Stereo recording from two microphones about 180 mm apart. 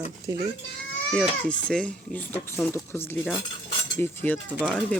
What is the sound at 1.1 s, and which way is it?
Speech, 5° left (ahead or behind).